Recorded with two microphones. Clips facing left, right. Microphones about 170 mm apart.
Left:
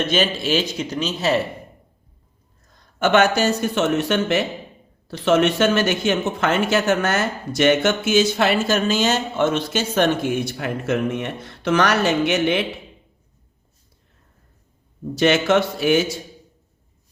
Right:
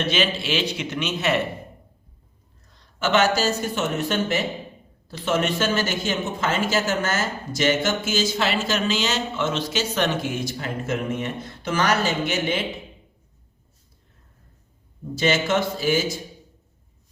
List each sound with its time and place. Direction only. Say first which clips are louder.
0.0 s a man's voice: left 3 dB; 45° left (ahead or behind)
3.0 s speech: left 4 dB; 60° left (ahead or behind)
15.1 s speech: left 5 dB; 70° left (ahead or behind)